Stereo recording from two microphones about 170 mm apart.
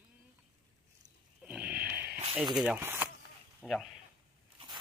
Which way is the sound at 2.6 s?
10° right (ahead or behind).